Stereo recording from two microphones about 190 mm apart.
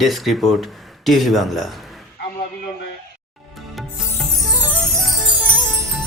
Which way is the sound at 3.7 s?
Centre (ahead or behind).